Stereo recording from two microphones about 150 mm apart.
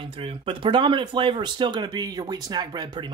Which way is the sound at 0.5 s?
35° right (ahead or behind).